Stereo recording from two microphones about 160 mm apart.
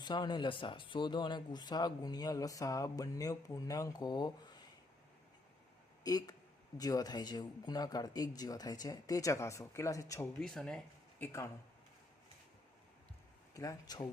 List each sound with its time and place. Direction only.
0.0 s speech: 25° left (ahead or behind)
6.0 s speech: 25° left (ahead or behind)
10.4 s speech: 5° left (ahead or behind)
11.3 s speech: 20° left (ahead or behind)
13.5 s speech: 20° left (ahead or behind)